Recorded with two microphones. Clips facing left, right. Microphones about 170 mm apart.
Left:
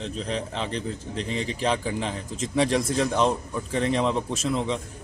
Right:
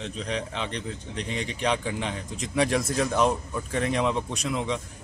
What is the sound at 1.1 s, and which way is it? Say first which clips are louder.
Speech: left 2 dB; 35° left (ahead or behind).